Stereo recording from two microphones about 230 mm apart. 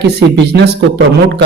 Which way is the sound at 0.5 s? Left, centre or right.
Right.